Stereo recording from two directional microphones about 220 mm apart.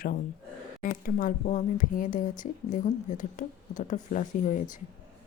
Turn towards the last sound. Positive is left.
turn(degrees=35)  # may be behind; listen again after turning